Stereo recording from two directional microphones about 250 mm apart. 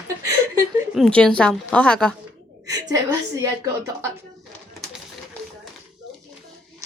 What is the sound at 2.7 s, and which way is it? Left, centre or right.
A child's voice, centre.